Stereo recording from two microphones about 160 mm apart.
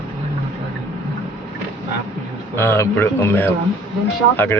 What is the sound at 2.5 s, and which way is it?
Speech, 15° left (ahead or behind).